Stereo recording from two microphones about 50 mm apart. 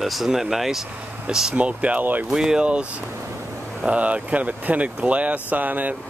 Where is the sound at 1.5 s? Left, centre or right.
Right.